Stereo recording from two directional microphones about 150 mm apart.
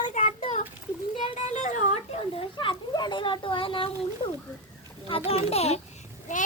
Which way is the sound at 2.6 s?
30° left (ahead or behind).